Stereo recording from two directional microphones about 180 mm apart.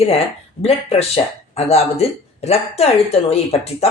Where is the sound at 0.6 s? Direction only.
35° left (ahead or behind).